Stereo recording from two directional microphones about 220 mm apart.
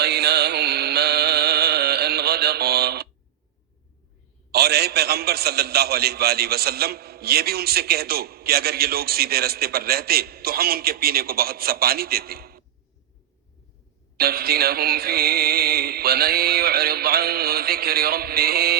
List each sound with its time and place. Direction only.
0.0 s music: 50° right (ahead or behind)
4.5 s a man's voice: 45° right (ahead or behind)
14.2 s a man's voice: 45° right (ahead or behind)